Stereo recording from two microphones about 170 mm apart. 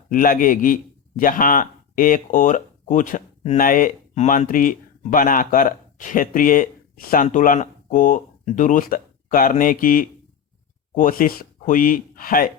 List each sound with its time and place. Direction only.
0.1 s a man's voice: 55° left (ahead or behind)